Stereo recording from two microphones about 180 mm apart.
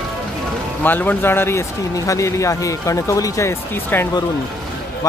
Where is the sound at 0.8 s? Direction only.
10° left (ahead or behind).